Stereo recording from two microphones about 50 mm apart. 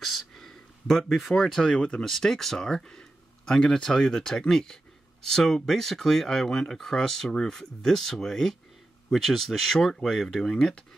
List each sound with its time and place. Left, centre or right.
0.0 s speech: centre
2.0 s speech: centre